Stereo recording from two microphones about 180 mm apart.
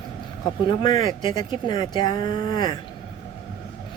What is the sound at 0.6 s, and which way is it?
A woman's voice, 25° left (ahead or behind).